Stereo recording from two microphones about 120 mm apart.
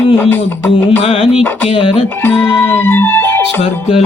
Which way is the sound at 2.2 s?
15° left (ahead or behind).